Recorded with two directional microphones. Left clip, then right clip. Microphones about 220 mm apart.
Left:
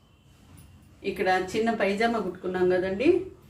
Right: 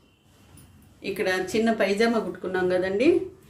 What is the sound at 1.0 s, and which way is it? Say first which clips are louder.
A woman's voice: left 1 dB; 45° right (ahead or behind).